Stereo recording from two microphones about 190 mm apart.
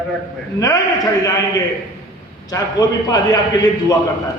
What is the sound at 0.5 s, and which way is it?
Speech, 20° left (ahead or behind).